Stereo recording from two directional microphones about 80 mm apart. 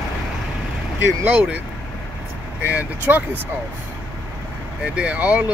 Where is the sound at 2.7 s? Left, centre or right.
Centre.